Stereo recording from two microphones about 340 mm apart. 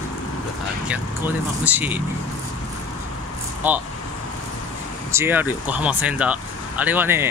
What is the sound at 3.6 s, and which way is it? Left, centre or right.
Speech, centre.